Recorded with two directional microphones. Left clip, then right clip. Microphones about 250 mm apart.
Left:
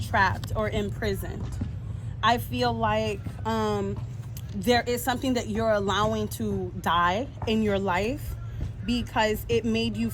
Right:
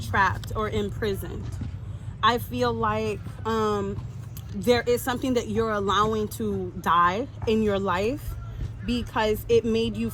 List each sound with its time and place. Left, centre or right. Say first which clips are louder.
0.1 s speech: right 1 dB; centre